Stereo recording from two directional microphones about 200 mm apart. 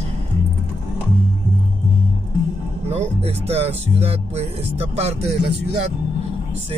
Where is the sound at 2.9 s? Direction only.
30° right (ahead or behind).